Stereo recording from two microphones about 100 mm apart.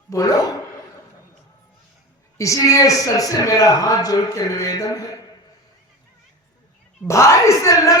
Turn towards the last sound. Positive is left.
turn(degrees=30)  # may be behind; listen again after turning